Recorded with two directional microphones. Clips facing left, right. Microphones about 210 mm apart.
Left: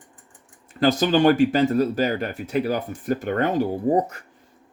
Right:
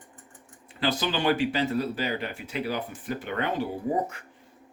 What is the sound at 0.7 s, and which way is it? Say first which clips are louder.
Speech: left 9 dB; 45° left (ahead or behind).